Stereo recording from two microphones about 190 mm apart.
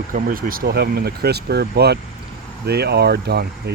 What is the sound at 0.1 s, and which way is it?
Speech, 45° right (ahead or behind).